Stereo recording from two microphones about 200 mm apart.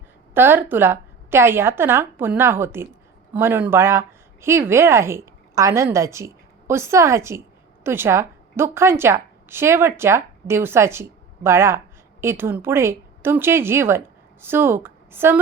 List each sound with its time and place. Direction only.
0.3 s a woman's voice: 10° right (ahead or behind)